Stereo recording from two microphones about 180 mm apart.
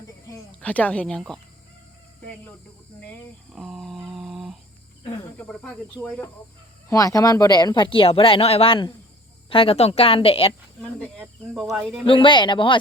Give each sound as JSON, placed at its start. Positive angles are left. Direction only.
{"t": 0.6, "sound": "speech", "side_deg": 10}
{"t": 3.0, "sound": "a sound", "side_deg": 5}
{"t": 5.4, "sound": "speech", "side_deg": 5}
{"t": 6.9, "sound": "a woman's voice", "side_deg": 20}
{"t": 11.2, "sound": "speech", "side_deg": 0}
{"t": 12.0, "sound": "speech", "side_deg": 30}